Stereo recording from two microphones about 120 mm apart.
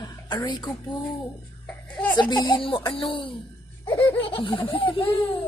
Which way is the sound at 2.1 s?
35° left (ahead or behind).